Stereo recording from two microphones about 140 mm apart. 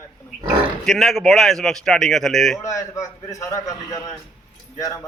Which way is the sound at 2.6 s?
25° left (ahead or behind).